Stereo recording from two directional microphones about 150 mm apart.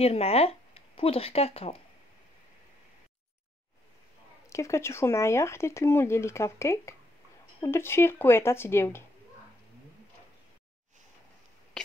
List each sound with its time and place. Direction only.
0.0 s speech: 40° left (ahead or behind)
4.5 s speech: 20° left (ahead or behind)
11.7 s sneeze: 5° left (ahead or behind)